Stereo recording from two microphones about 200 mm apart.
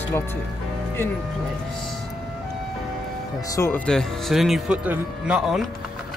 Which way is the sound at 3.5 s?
10° left (ahead or behind).